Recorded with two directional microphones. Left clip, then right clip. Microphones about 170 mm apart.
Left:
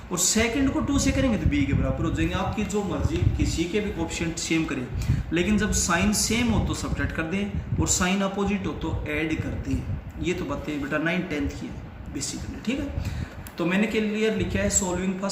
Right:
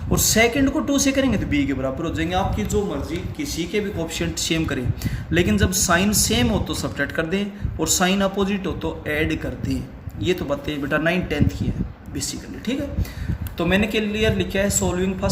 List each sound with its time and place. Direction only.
0.1 s speech: 50° right (ahead or behind)
4.1 s speech: 55° right (ahead or behind)